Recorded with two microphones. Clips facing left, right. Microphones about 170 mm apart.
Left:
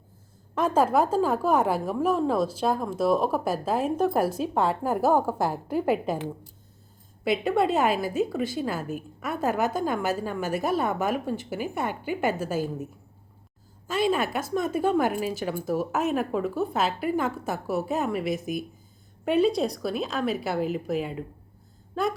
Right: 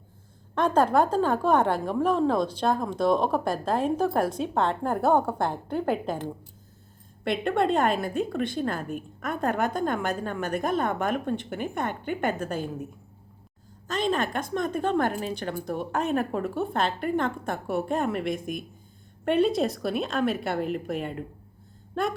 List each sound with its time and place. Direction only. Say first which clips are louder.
0.5 s a woman's voice: even; 5° left (ahead or behind)
7.3 s a woman's voice: left 1 dB; 5° left (ahead or behind)